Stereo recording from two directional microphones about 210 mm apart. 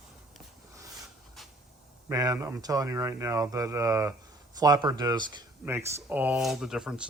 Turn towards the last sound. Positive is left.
turn(degrees=-5)  # may be behind; listen again after turning